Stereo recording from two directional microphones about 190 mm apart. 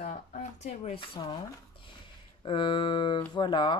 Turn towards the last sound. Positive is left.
turn(degrees=25)  # may be behind; listen again after turning